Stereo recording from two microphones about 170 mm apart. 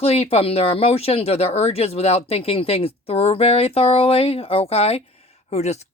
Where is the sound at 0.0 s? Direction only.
35° left (ahead or behind).